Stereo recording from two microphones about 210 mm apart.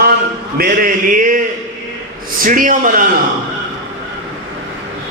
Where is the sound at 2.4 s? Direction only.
40° right (ahead or behind).